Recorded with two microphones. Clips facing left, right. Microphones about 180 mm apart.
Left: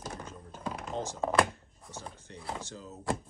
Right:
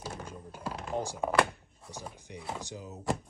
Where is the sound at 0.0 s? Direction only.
10° right (ahead or behind).